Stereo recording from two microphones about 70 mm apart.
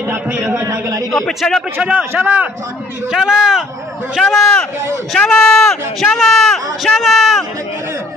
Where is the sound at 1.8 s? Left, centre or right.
Centre.